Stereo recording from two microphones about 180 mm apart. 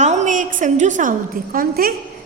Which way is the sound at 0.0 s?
40° right (ahead or behind).